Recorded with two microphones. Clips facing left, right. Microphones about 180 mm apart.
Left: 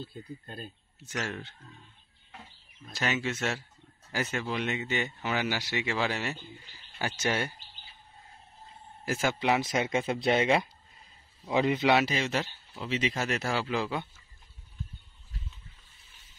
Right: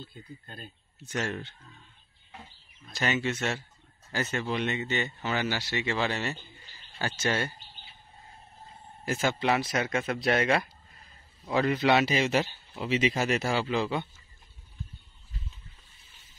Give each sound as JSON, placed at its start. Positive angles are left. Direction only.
{"t": 0.0, "sound": "speech", "side_deg": 35}
{"t": 1.0, "sound": "speech", "side_deg": 0}
{"t": 2.9, "sound": "speech", "side_deg": 5}
{"t": 9.0, "sound": "speech", "side_deg": 5}
{"t": 12.1, "sound": "speech", "side_deg": -10}